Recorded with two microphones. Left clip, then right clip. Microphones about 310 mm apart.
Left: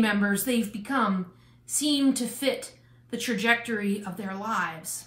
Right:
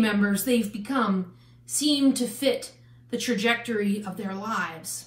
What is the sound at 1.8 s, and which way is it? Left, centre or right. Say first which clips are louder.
A woman's voice: right 2 dB; centre.